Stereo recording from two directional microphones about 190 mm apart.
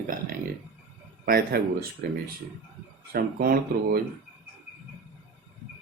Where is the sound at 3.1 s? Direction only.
50° right (ahead or behind).